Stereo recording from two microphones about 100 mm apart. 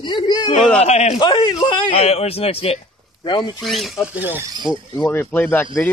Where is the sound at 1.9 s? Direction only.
90° left.